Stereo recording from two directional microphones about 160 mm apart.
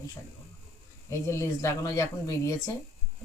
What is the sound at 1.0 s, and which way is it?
Speech, 20° left (ahead or behind).